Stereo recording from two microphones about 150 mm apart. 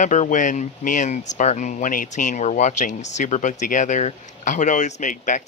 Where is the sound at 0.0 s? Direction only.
55° left (ahead or behind).